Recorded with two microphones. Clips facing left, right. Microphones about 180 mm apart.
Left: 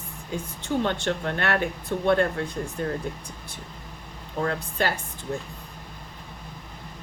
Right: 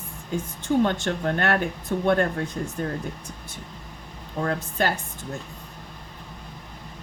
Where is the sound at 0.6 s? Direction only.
45° right (ahead or behind).